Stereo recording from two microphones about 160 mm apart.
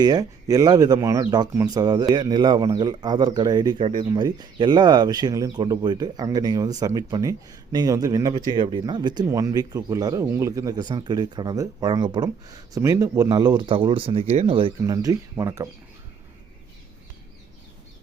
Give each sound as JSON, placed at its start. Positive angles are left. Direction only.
{"t": 0.0, "sound": "speech", "side_deg": -25}
{"t": 14.8, "sound": "speech", "side_deg": -20}